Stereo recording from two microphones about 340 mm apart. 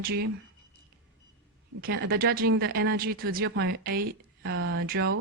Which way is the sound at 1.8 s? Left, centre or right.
Right.